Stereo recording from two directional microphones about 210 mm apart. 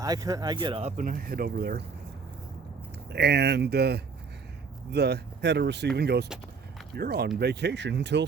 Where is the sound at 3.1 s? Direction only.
50° right (ahead or behind).